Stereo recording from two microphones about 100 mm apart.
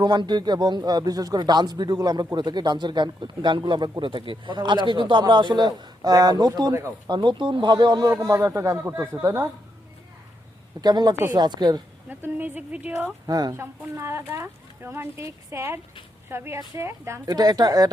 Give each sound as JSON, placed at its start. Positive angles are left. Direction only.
{"t": 0.0, "sound": "speech", "side_deg": -45}
{"t": 8.2, "sound": "speech", "side_deg": -35}
{"t": 10.8, "sound": "speech", "side_deg": -45}
{"t": 12.0, "sound": "speech", "side_deg": -20}
{"t": 13.2, "sound": "speech", "side_deg": -40}
{"t": 13.5, "sound": "speech", "side_deg": -25}
{"t": 17.3, "sound": "speech", "side_deg": -40}